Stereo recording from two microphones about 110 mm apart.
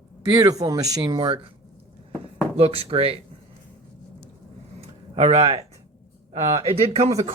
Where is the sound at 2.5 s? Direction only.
60° right (ahead or behind).